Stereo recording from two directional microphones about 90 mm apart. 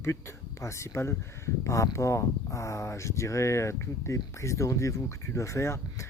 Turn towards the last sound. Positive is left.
turn(degrees=30)  # may be behind; listen again after turning